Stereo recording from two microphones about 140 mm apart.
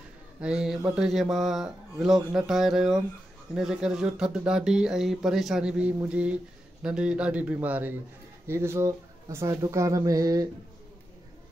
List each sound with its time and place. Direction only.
0.4 s speech: 5° right (ahead or behind); by 10.5 s 25° right (ahead or behind)